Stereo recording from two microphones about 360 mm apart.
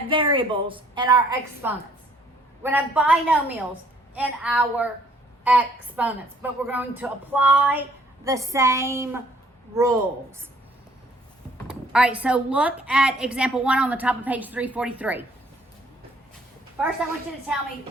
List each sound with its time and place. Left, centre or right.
0.1 s a woman's voice: centre
11.5 s speech: centre
16.8 s speech: centre